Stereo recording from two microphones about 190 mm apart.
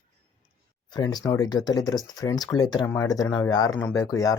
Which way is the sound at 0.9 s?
20° left (ahead or behind).